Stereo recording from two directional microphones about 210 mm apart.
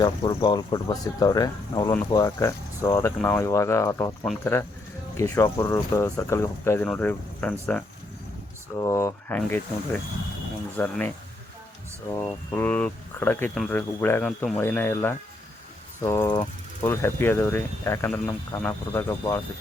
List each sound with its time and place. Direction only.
0.0 s speech: 20° left (ahead or behind)
8.8 s speech: 15° left (ahead or behind)